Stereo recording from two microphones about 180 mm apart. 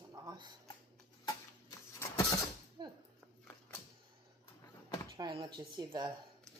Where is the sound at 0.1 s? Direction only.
20° right (ahead or behind).